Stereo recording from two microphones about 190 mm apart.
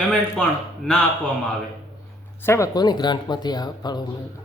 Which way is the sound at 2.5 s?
20° left (ahead or behind).